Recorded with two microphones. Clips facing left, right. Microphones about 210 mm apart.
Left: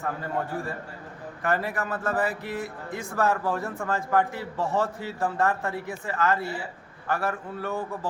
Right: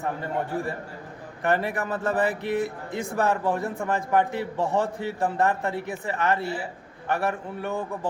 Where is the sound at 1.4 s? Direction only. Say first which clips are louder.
Right 3 dB; 20° right (ahead or behind).